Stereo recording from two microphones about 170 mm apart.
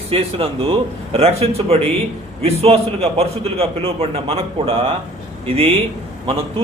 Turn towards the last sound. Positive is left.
turn(degrees=-30)  # may be behind; listen again after turning